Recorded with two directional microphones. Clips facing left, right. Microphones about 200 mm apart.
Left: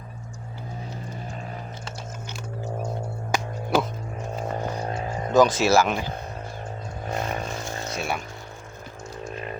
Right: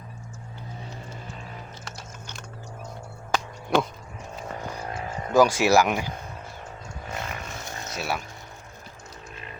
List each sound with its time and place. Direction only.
3.3 s music: 5° left (ahead or behind)
4.4 s a sound: 30° left (ahead or behind)
5.3 s speech: 10° right (ahead or behind)
7.1 s vehicle: 35° left (ahead or behind)
7.9 s speech: 5° right (ahead or behind)